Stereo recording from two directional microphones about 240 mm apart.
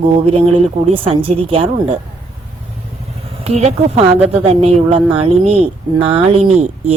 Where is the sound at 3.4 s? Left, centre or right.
Right.